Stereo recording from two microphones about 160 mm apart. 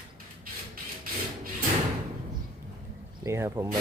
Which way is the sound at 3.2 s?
15° right (ahead or behind).